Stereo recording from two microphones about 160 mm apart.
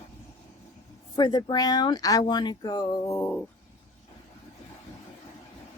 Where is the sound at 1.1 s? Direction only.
30° left (ahead or behind); by 3.4 s 10° left (ahead or behind).